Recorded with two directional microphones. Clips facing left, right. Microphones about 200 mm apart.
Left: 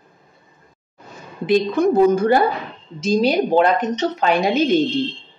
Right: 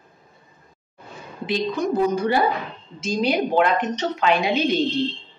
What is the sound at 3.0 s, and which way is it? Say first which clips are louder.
A woman's voice: left 5 dB; 35° left (ahead or behind).